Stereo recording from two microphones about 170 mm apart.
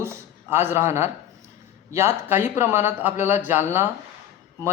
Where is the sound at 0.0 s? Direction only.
15° right (ahead or behind).